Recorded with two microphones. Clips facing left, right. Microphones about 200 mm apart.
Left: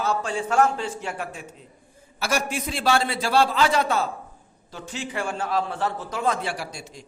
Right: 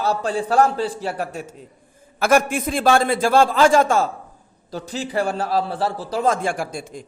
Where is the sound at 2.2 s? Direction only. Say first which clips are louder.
Right 9 dB; 55° right (ahead or behind).